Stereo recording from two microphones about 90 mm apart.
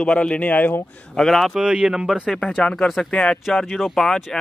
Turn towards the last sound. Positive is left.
turn(degrees=0)  # may be behind; listen again after turning